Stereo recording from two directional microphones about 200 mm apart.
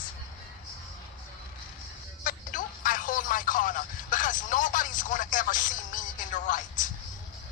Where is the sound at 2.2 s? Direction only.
45° left (ahead or behind).